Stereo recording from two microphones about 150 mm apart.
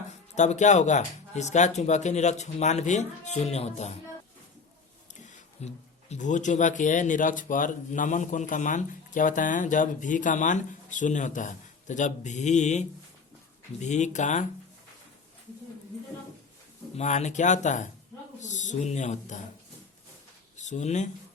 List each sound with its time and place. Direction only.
0.3 s speech: 50° left (ahead or behind)
5.2 s speech: 50° left (ahead or behind)
13.8 s speech: 50° left (ahead or behind)
17.0 s speech: 50° left (ahead or behind)
20.6 s speech: 55° left (ahead or behind)